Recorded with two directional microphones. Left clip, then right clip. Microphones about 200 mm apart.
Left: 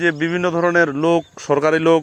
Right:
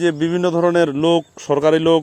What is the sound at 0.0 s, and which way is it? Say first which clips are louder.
Speech: right 1 dB; 25° right (ahead or behind).